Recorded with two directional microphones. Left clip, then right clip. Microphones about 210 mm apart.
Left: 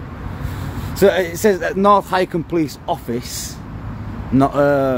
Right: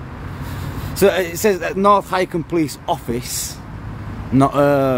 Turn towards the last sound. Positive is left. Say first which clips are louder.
# even
turn(degrees=-15)  # may be behind; listen again after turning